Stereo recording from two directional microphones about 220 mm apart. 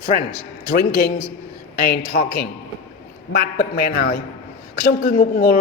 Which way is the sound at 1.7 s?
40° left (ahead or behind).